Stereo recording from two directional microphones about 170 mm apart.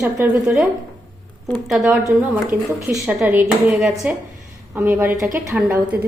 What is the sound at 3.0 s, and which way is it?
A woman's voice, 5° right (ahead or behind).